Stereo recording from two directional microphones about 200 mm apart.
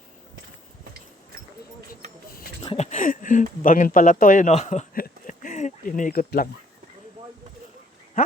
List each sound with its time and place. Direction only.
2.7 s speech: 35° left (ahead or behind)